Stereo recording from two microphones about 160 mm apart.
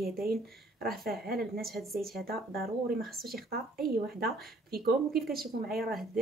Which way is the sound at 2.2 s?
70° right (ahead or behind).